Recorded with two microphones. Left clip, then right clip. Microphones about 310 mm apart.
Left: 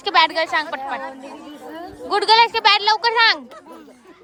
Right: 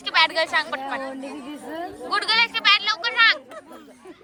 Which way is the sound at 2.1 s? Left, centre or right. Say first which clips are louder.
Left 6 dB; centre.